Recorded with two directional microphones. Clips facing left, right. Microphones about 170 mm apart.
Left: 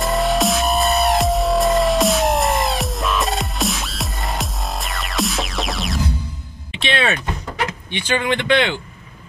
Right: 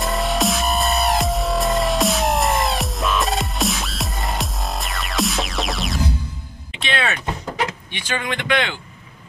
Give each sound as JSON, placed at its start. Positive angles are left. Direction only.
{"t": 0.0, "sound": "music", "side_deg": 0}
{"t": 6.8, "sound": "a sound", "side_deg": 25}
{"t": 7.9, "sound": "speech", "side_deg": 30}